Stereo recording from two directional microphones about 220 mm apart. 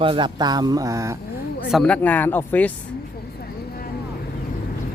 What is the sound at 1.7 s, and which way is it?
Speech, centre (ahead or behind).